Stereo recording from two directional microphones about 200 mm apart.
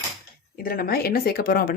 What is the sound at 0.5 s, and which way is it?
A woman's voice, 45° left (ahead or behind).